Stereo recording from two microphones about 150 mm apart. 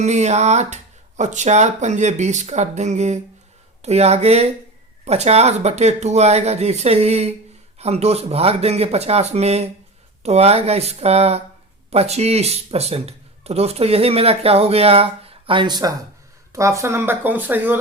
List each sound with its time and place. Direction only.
0.0 s speech: 50° right (ahead or behind); by 17.7 s 10° right (ahead or behind)